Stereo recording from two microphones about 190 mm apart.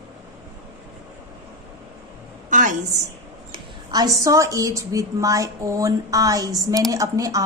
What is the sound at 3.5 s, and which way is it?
A woman's voice, 20° right (ahead or behind).